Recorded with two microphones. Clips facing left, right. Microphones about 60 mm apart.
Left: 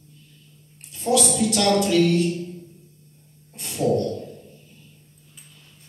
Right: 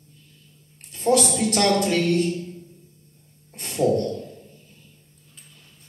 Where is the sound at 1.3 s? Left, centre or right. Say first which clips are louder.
Even; right.